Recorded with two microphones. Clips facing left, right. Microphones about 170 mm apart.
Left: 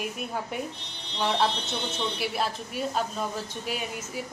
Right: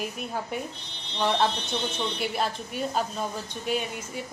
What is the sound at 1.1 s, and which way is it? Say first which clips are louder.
Speech: right 1 dB; 5° left (ahead or behind).